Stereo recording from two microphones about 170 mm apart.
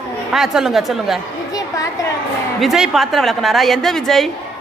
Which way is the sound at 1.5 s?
20° left (ahead or behind).